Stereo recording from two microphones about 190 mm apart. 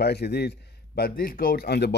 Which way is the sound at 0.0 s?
60° left (ahead or behind).